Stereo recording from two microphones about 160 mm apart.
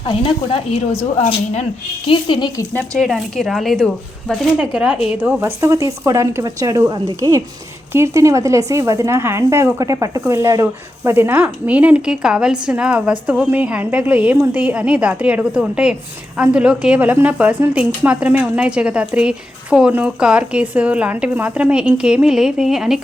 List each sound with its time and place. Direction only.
0.1 s a woman's voice: 35° left (ahead or behind)
2.0 s speech: 30° left (ahead or behind)
2.7 s speech: 5° left (ahead or behind)